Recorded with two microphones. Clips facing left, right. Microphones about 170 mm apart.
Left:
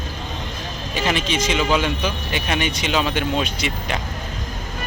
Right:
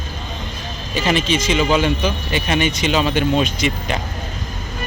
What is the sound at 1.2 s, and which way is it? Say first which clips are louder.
Speech: right 4 dB; 60° left (ahead or behind).